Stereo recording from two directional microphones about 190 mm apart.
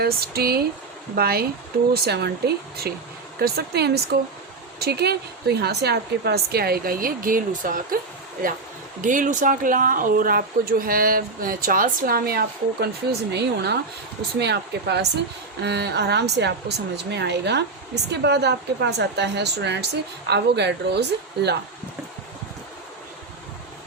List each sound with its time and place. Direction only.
0.0 s a woman's voice: 55° right (ahead or behind)
9.0 s a woman's voice: 40° right (ahead or behind); by 21.6 s 60° right (ahead or behind)